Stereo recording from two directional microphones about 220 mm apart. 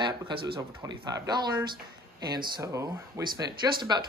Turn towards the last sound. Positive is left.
turn(degrees=-20)  # may be behind; listen again after turning